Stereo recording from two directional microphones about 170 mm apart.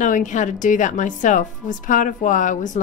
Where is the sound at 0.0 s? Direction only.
45° left (ahead or behind).